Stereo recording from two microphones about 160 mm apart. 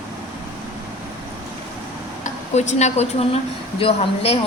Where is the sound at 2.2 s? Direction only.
45° left (ahead or behind).